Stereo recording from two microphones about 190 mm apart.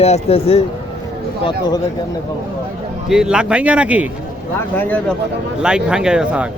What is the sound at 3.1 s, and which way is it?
A man's voice, 5° right (ahead or behind).